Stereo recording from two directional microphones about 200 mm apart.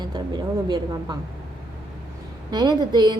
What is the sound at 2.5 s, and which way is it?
Speech, 20° right (ahead or behind).